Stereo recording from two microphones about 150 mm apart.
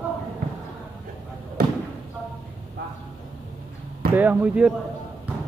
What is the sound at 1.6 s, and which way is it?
Basketball bounce, 90° right.